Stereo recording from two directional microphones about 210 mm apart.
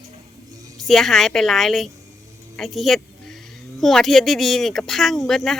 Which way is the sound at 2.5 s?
Centre (ahead or behind).